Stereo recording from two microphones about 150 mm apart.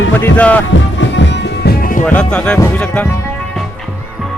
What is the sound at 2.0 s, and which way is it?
Music, 10° left (ahead or behind).